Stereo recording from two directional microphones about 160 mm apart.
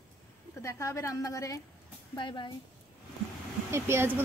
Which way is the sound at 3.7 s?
15° right (ahead or behind).